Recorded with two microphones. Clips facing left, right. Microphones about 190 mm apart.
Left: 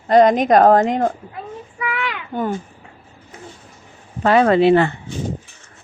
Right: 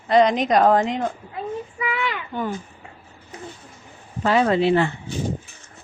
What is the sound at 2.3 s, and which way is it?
Speech, 45° left (ahead or behind).